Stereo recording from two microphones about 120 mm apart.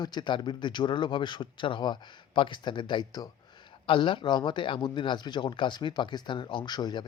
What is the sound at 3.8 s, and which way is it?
Speech, 45° left (ahead or behind).